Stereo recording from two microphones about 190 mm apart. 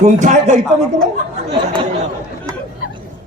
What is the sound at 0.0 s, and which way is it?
Speech, 40° right (ahead or behind).